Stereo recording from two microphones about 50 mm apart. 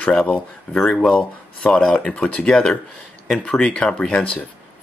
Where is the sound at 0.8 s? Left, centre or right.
Centre.